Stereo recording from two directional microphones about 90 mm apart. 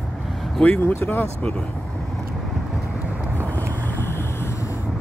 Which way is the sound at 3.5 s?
25° left (ahead or behind).